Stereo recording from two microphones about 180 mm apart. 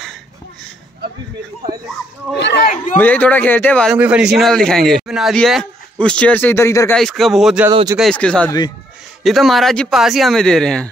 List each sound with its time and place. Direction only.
2.3 s speech: 75° left (ahead or behind)
2.6 s speech: 45° left (ahead or behind)
3.0 s speech: 10° left (ahead or behind)
3.9 s a man's voice: 5° right (ahead or behind); by 7.0 s 15° left (ahead or behind)
7.0 s a man's voice: centre (ahead or behind)
7.7 s speech: 20° right (ahead or behind)
8.0 s a man's voice: 5° left (ahead or behind)
8.5 s speech: 20° left (ahead or behind)
9.2 s a man's voice: centre (ahead or behind)